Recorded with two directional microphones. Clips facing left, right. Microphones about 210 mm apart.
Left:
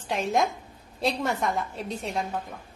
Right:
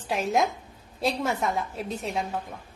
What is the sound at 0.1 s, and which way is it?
A woman's voice, centre (ahead or behind).